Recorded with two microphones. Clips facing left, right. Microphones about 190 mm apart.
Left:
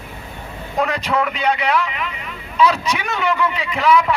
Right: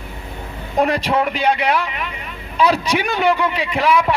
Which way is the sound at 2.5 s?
35° right (ahead or behind).